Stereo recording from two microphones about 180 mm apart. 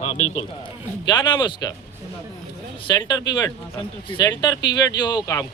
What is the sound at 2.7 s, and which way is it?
Speech, 25° left (ahead or behind).